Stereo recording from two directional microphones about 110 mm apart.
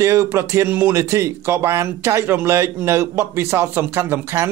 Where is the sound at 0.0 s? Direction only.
25° right (ahead or behind).